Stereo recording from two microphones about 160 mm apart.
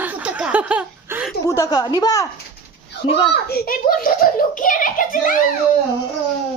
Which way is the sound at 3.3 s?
80° left.